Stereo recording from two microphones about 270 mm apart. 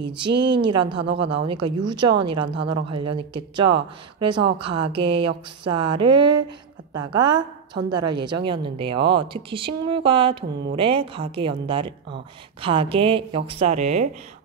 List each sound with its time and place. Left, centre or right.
0.4 s a woman's voice: centre
1.0 s speech: right
1.3 s a woman's voice: centre